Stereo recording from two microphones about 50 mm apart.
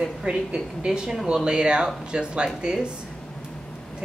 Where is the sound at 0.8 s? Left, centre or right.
Centre.